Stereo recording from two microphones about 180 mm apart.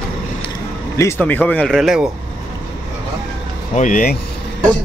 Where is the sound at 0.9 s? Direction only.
15° left (ahead or behind); by 2.0 s centre (ahead or behind).